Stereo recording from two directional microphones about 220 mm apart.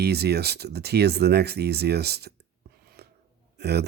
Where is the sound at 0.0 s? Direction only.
45° right (ahead or behind).